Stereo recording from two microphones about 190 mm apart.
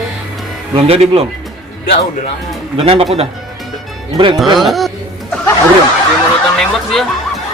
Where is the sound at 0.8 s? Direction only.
35° right (ahead or behind).